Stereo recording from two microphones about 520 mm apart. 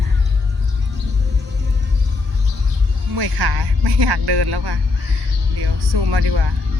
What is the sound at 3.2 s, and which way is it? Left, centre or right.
Music, right.